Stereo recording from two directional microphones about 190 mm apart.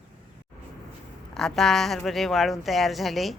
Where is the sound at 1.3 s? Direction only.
Centre (ahead or behind).